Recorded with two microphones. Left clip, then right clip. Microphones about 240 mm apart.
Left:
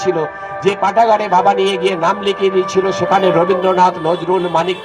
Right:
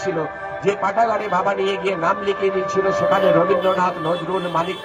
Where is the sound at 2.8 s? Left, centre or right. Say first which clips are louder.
Left 2 dB; left.